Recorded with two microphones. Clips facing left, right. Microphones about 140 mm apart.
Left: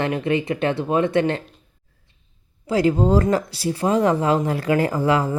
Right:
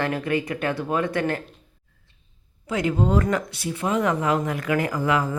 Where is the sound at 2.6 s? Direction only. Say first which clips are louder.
Left 5 dB; 30° left (ahead or behind).